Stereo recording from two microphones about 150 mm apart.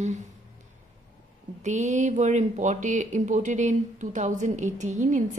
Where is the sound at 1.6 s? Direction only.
55° right (ahead or behind).